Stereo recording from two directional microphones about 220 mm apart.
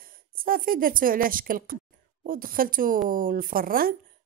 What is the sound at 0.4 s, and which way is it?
Speech, 40° right (ahead or behind).